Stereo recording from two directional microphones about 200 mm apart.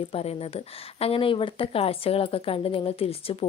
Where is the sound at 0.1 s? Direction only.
30° left (ahead or behind).